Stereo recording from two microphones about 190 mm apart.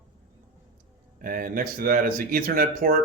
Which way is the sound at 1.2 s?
50° right (ahead or behind).